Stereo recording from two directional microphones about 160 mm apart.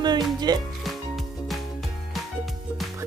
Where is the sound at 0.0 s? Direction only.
25° right (ahead or behind).